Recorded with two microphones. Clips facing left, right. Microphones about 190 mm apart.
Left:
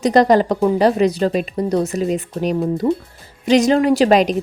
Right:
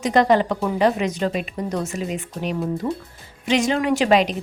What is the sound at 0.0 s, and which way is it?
A woman's voice, 35° left (ahead or behind).